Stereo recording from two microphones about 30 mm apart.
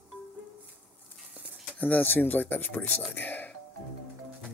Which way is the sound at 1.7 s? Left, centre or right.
Left.